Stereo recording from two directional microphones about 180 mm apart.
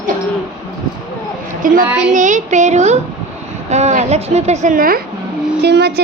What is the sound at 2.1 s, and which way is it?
A woman's voice, 45° right (ahead or behind).